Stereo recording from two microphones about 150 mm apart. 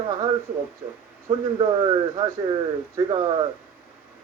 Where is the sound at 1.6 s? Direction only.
30° right (ahead or behind).